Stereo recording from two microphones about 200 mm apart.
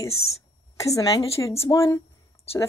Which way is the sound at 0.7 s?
15° left (ahead or behind).